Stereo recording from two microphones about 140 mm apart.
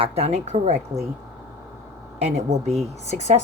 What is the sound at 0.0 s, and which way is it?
Speech, 50° right (ahead or behind).